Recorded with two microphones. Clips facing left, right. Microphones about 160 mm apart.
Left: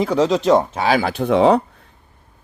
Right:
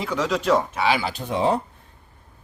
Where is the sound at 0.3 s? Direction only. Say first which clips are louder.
Left 3 dB; 25° left (ahead or behind).